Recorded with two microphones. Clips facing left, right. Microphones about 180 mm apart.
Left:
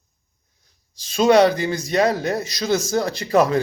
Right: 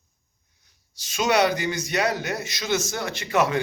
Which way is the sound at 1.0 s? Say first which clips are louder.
Left 7 dB; 35° left (ahead or behind).